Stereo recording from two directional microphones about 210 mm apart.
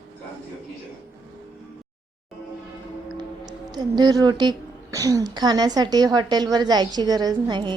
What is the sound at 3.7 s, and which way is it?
A woman's voice, 20° right (ahead or behind).